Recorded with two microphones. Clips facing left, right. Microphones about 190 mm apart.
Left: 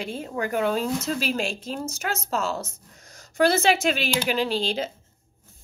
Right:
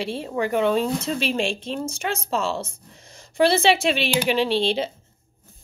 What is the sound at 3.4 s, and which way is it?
Speech, 30° right (ahead or behind).